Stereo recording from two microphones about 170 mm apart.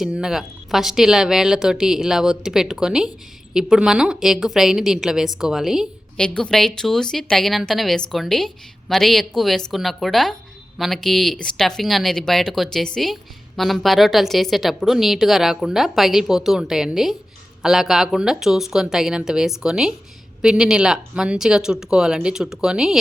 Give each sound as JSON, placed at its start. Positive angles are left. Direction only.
{"t": 0.0, "sound": "a woman's voice", "side_deg": -5}